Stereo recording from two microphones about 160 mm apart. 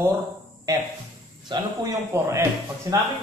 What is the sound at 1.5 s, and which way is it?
A man's voice, 20° right (ahead or behind).